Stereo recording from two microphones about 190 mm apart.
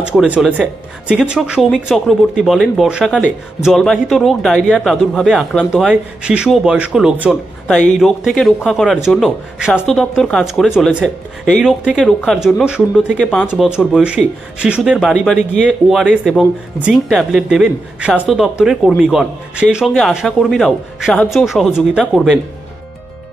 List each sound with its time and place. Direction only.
0.0 s speech: 5° right (ahead or behind)
13.5 s speech: 5° right (ahead or behind)